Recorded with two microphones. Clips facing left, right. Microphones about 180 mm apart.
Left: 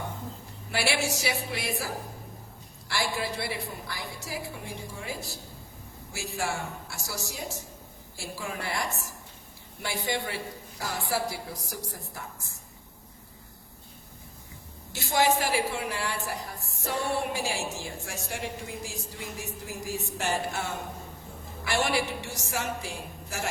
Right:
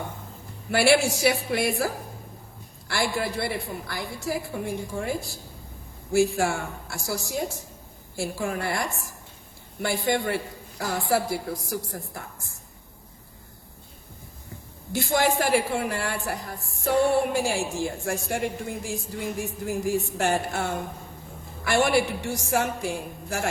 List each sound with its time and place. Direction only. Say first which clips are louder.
0.7 s a woman's voice: right 9 dB; 55° right (ahead or behind)
6.1 s a woman's voice: right 11 dB; 55° right (ahead or behind)
14.9 s a woman's voice: right 2 dB; 50° right (ahead or behind)